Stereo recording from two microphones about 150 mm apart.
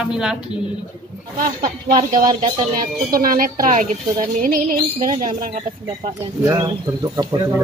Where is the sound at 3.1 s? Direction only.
70° right (ahead or behind).